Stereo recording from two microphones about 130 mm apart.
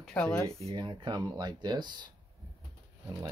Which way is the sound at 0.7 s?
35° right (ahead or behind).